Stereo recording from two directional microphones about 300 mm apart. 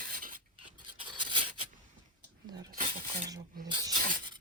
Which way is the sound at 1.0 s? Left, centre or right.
Centre.